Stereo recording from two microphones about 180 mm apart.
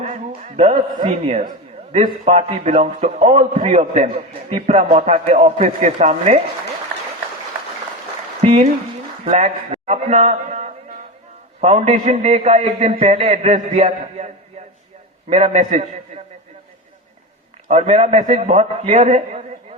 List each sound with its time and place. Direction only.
0.0 s a man's voice: 40° right (ahead or behind)
8.4 s a sound: 40° right (ahead or behind)
9.2 s a man's voice: 40° right (ahead or behind)
15.3 s a man's voice: 35° right (ahead or behind)
17.7 s a man's voice: 35° right (ahead or behind)